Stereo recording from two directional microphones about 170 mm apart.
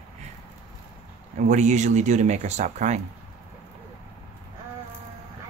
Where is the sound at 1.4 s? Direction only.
45° right (ahead or behind).